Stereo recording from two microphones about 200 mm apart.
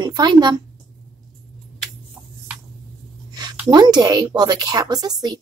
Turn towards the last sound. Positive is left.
turn(degrees=-20)  # may be behind; listen again after turning